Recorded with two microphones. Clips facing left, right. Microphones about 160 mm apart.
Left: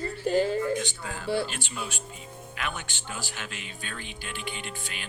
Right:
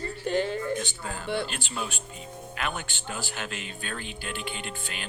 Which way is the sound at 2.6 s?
40° right (ahead or behind).